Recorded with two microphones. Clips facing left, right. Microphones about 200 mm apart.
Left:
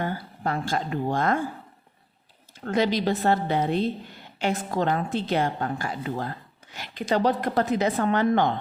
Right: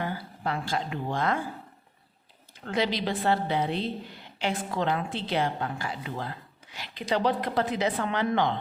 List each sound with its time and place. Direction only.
0.0 s a woman's voice: 45° left (ahead or behind)
2.6 s a woman's voice: 45° left (ahead or behind)